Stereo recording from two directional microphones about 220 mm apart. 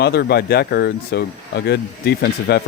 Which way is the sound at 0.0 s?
50° left (ahead or behind).